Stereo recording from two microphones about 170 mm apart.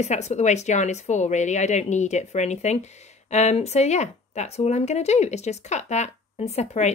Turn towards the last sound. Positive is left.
turn(degrees=40)  # may be behind; listen again after turning